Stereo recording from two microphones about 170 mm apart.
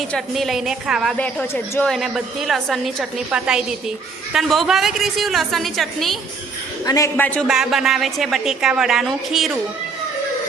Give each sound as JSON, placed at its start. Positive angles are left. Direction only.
{"t": 0.0, "sound": "a woman's voice", "side_deg": 0}
{"t": 1.1, "sound": "a woman's voice", "side_deg": 10}
{"t": 6.8, "sound": "a woman's voice", "side_deg": 20}
{"t": 7.4, "sound": "a woman's voice", "side_deg": 0}